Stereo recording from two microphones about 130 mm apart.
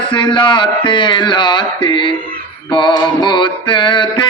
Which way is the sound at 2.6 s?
35° left (ahead or behind).